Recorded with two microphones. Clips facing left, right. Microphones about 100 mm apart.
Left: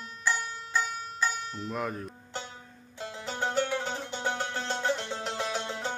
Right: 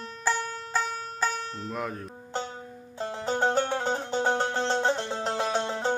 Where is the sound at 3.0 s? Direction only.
40° right (ahead or behind).